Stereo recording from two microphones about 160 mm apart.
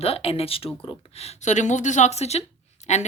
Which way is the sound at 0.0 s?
40° left (ahead or behind).